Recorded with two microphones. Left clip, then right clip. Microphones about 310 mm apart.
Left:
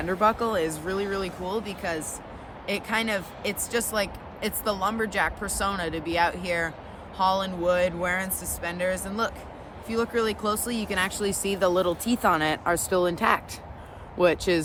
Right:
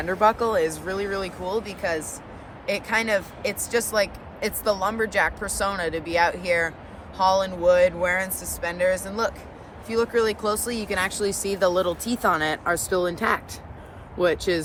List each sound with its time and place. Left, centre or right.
0.0 s speech: centre